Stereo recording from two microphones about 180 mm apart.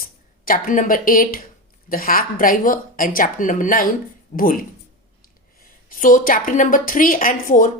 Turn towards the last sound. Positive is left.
turn(degrees=50)  # may be behind; listen again after turning